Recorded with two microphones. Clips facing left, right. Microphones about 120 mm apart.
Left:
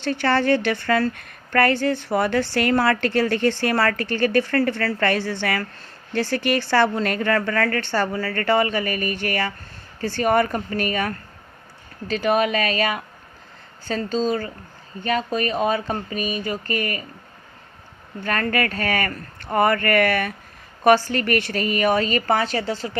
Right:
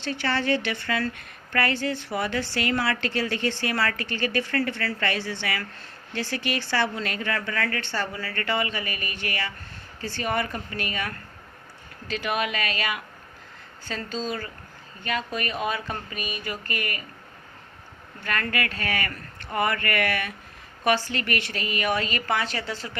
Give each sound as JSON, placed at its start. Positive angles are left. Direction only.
{"t": 0.0, "sound": "a woman's voice", "side_deg": 50}
{"t": 18.2, "sound": "a woman's voice", "side_deg": 40}